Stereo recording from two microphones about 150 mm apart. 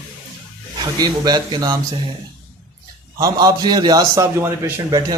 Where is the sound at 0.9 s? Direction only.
25° right (ahead or behind).